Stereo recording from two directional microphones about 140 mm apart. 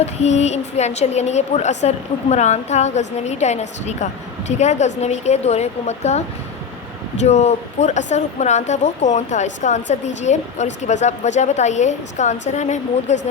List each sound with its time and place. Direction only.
0.0 s a woman's voice: 50° left (ahead or behind)
7.3 s speech: 50° left (ahead or behind)